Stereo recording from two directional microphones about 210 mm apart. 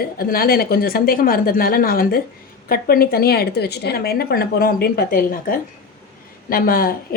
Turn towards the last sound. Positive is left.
turn(degrees=45)  # may be behind; listen again after turning